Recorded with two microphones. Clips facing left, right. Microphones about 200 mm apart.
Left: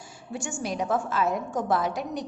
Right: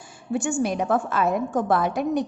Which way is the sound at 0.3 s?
55° right (ahead or behind).